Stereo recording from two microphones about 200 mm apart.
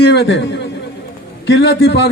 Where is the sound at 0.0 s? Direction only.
55° left (ahead or behind).